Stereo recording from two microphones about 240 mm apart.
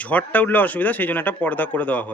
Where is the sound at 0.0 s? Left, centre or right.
Centre.